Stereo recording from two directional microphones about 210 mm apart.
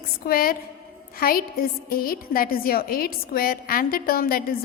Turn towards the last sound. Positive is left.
turn(degrees=45)  # may be behind; listen again after turning